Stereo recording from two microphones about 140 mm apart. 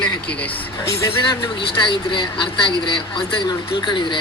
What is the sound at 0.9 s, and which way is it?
Speech, 25° left (ahead or behind).